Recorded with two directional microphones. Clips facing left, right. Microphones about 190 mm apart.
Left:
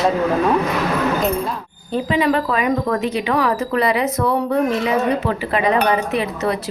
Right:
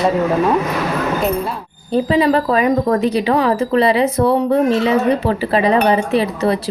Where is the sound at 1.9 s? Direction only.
35° right (ahead or behind).